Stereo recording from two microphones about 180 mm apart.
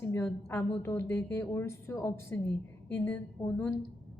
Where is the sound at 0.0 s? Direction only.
15° left (ahead or behind).